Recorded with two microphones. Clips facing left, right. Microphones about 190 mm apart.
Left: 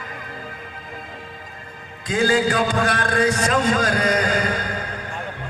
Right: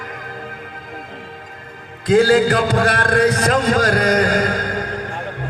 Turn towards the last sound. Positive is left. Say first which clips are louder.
# right 4 dB
turn(degrees=-55)  # may be behind; listen again after turning